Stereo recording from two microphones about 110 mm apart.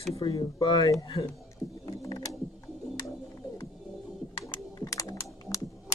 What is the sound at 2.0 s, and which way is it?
Mechanisms, 30° left (ahead or behind).